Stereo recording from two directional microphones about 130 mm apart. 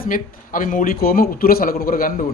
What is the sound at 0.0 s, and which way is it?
A man's voice, 90° left.